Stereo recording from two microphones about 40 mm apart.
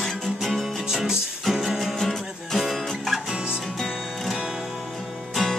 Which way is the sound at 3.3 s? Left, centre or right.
Right.